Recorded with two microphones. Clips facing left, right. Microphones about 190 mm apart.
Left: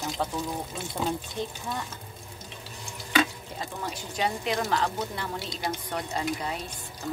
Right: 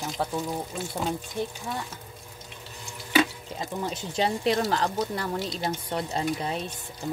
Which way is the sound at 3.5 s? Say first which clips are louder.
Right 4 dB; 20° right (ahead or behind).